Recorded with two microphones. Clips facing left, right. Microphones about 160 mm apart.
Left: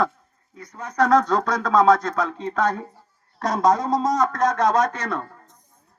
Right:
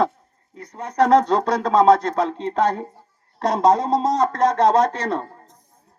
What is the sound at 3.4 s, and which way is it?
Speech, 30° right (ahead or behind).